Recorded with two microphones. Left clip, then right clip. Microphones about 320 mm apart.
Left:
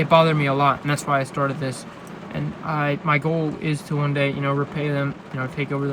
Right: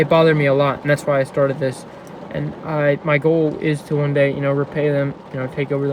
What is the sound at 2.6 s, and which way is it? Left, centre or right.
Speech, centre.